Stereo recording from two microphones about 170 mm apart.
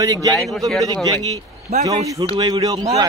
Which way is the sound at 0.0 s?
20° right (ahead or behind).